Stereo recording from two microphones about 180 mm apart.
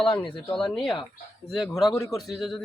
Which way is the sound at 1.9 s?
20° left (ahead or behind).